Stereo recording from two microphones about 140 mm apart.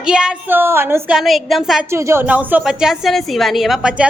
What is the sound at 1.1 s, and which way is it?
Speech, centre (ahead or behind).